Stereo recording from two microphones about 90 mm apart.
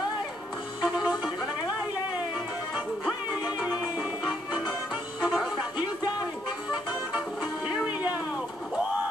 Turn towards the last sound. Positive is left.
turn(degrees=-10)  # may be behind; listen again after turning